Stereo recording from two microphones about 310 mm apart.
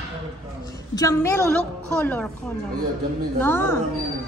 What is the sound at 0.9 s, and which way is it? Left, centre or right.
A woman's voice, centre.